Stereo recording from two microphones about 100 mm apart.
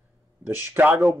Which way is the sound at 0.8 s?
20° right (ahead or behind).